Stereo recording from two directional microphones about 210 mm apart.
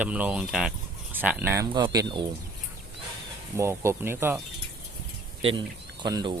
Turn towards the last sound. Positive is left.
turn(degrees=-20)  # may be behind; listen again after turning